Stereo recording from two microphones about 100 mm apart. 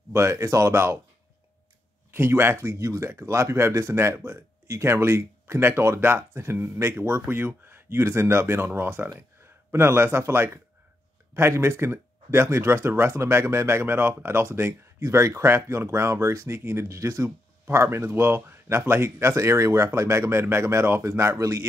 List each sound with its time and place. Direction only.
0.1 s speech: 30° right (ahead or behind)
2.1 s speech: 25° right (ahead or behind)